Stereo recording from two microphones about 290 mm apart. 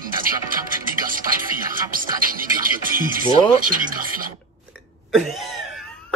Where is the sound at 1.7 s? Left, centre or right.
Right.